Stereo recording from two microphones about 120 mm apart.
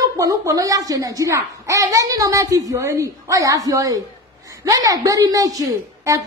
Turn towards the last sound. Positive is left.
turn(degrees=-30)  # may be behind; listen again after turning